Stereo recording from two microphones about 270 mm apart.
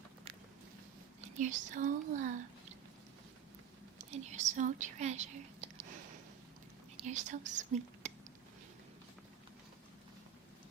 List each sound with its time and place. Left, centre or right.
1.2 s a child's voice: right
3.9 s speech: right
6.9 s speech: right